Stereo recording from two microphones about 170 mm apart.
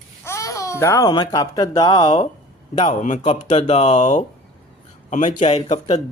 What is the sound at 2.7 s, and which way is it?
A child's voice, 45° left (ahead or behind).